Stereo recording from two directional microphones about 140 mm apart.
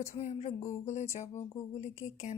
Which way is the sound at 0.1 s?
50° left (ahead or behind).